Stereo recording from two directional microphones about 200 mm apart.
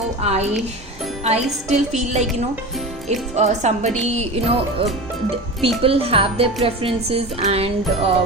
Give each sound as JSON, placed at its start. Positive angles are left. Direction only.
{"t": 0.3, "sound": "a woman's voice", "side_deg": -35}
{"t": 1.2, "sound": "music", "side_deg": -35}
{"t": 1.7, "sound": "a woman's voice", "side_deg": -35}
{"t": 5.8, "sound": "music", "side_deg": -30}